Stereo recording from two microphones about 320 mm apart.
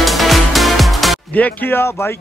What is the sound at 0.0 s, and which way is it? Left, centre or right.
Music, centre.